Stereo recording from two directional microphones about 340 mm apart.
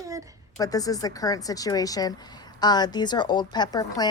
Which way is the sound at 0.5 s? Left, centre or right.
Centre.